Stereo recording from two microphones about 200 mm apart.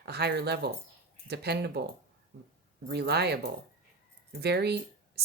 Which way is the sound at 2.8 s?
55° right (ahead or behind).